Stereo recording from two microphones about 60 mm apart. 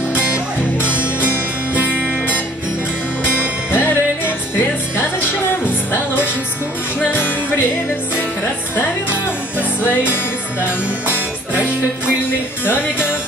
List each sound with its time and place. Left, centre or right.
1.7 s music: right
3.7 s music: left
5.5 s music: left
9.6 s music: left